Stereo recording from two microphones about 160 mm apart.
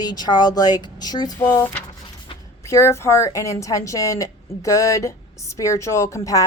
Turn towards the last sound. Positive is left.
turn(degrees=20)  # may be behind; listen again after turning